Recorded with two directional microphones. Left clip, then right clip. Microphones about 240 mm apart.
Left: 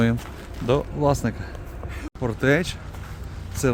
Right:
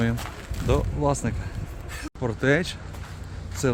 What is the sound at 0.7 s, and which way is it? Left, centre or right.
Speech, left.